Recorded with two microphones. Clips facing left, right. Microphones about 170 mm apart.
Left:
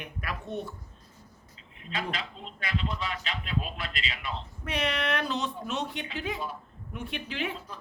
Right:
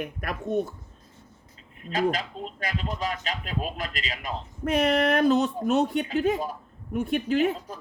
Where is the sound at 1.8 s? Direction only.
45° right (ahead or behind).